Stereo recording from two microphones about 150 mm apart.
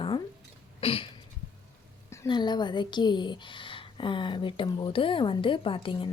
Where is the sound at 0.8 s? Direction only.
40° left (ahead or behind).